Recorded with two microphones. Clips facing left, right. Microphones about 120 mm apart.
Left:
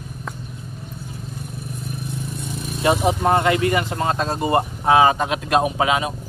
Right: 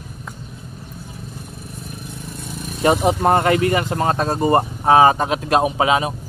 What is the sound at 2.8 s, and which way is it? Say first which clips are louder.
Speech: right 2 dB; 45° right (ahead or behind).